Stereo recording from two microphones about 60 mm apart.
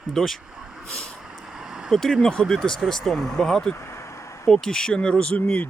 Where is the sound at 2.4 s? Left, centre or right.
Centre.